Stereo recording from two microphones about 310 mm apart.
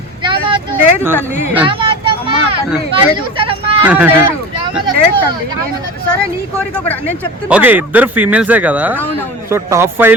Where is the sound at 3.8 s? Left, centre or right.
Centre.